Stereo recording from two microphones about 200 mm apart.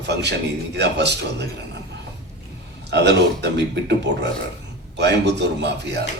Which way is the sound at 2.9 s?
60° right (ahead or behind).